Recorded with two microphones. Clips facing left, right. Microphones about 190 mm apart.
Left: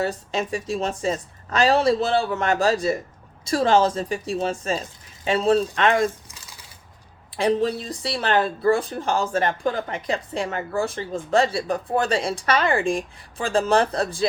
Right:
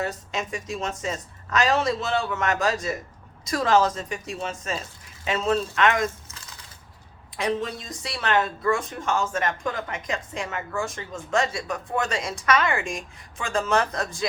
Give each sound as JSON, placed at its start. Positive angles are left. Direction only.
{"t": 0.0, "sound": "speech", "side_deg": 30}
{"t": 7.3, "sound": "speech", "side_deg": 35}